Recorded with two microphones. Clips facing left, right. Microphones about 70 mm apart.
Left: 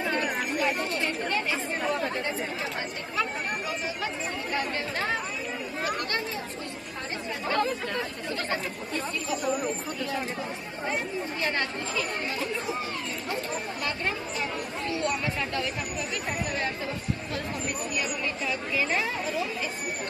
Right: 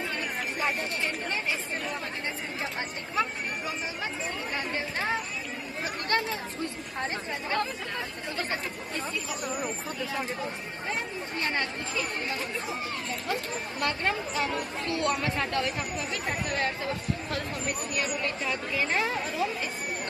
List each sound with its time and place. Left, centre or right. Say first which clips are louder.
3.2 s speech: even; right
6.0 s speech: right 3 dB; right
13.8 s speech: right 4 dB; right